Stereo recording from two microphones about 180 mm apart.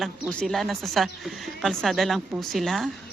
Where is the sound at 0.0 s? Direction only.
5° left (ahead or behind).